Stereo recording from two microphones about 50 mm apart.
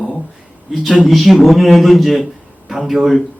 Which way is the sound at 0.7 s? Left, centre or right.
Centre.